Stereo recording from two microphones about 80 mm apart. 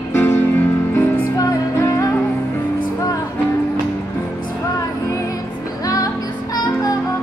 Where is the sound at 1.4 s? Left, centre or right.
Left.